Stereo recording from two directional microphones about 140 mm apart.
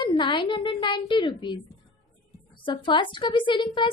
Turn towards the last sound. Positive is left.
turn(degrees=35)  # may be behind; listen again after turning